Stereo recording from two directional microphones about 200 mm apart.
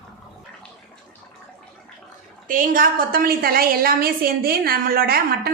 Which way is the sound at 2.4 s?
45° right (ahead or behind).